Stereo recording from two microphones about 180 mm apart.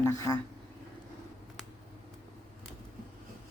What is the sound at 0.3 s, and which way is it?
Speech, 15° left (ahead or behind).